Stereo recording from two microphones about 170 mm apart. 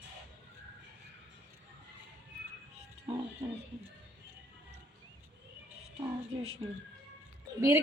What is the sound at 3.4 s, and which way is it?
Speech, 35° right (ahead or behind).